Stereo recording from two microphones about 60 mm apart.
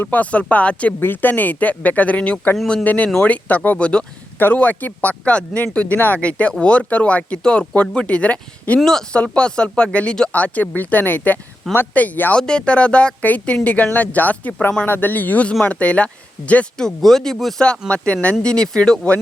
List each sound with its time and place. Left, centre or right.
0.0 s speech: left
0.9 s speech: left
5.0 s speech: centre
8.8 s speech: centre; by 12.4 s left
12.4 s speech: centre
16.7 s speech: centre